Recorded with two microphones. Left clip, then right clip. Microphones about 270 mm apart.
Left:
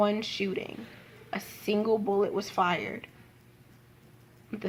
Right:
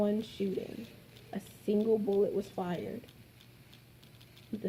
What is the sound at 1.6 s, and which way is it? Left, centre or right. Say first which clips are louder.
Speech: left 3 dB; left.